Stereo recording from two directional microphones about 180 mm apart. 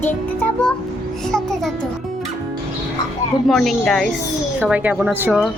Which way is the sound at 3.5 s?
Centre (ahead or behind).